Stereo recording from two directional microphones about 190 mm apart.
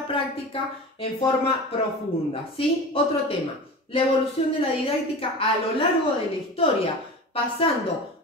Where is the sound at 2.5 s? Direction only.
30° left (ahead or behind).